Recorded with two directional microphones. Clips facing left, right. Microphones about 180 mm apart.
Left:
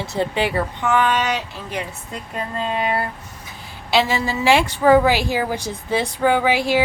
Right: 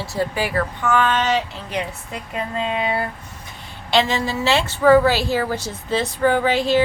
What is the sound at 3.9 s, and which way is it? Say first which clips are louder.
A woman's voice: even; 10° left (ahead or behind).